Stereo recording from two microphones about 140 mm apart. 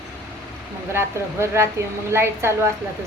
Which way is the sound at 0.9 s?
20° right (ahead or behind).